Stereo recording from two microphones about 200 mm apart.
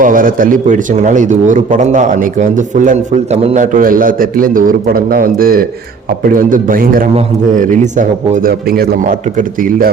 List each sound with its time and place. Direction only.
0.0 s a man's voice: 45° right (ahead or behind)